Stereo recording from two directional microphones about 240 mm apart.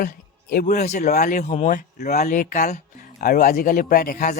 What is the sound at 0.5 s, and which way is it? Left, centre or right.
A man's voice, left.